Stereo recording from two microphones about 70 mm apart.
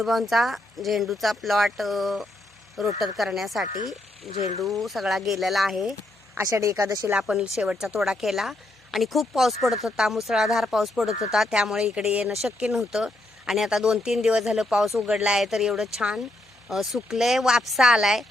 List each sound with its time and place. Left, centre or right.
0.0 s speech: centre
6.6 s speech: right
7.1 s speech: centre